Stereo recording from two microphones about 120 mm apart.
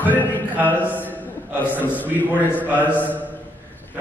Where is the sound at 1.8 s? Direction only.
15° left (ahead or behind).